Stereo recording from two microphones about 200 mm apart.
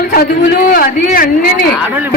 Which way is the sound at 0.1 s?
45° left (ahead or behind).